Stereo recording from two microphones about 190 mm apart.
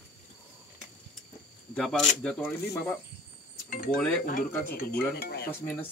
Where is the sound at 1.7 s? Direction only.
5° left (ahead or behind).